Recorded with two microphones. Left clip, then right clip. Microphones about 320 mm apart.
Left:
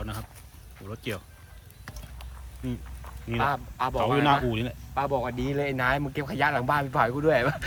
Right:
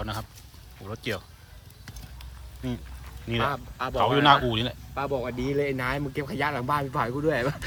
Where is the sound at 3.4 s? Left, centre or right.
Left.